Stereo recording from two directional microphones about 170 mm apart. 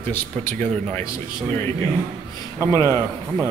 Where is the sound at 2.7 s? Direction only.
15° left (ahead or behind).